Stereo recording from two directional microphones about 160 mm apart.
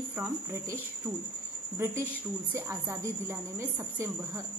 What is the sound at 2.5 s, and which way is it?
A woman's voice, 15° right (ahead or behind).